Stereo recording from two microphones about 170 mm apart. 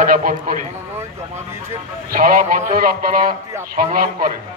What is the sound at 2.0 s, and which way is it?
A man's voice, 55° right (ahead or behind).